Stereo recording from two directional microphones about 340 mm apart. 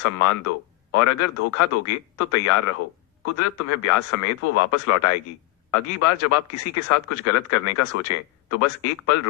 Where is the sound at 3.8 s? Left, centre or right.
Left.